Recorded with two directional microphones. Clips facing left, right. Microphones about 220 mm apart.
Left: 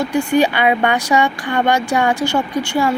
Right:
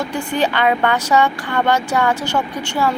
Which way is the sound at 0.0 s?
10° left (ahead or behind).